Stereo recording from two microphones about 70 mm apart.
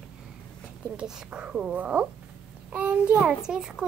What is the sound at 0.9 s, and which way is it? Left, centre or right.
A woman's voice, centre.